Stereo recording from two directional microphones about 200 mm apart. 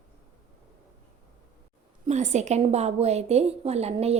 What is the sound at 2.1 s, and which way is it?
A woman's voice, 35° right (ahead or behind).